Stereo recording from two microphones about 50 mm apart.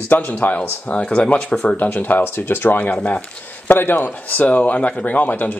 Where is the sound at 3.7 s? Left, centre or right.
Left.